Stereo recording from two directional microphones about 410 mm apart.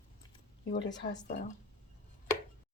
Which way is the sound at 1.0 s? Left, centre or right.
Centre.